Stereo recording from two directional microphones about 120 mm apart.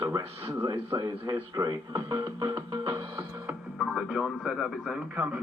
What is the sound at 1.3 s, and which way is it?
Speech, 30° right (ahead or behind).